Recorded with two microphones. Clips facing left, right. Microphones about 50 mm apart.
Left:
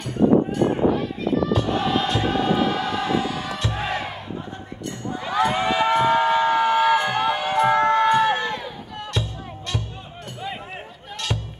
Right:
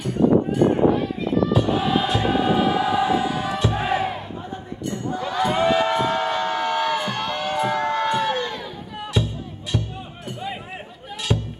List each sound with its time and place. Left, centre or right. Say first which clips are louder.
0.0 s a sound: even; centre
1.5 s choir: right 1 dB; centre
5.1 s a sound: left 1 dB; centre
7.9 s run: left 4 dB; centre
8.9 s music: right 4 dB; centre
11.3 s music: right 6 dB; centre